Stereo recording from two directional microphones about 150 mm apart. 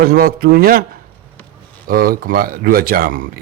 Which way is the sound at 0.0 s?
85° right.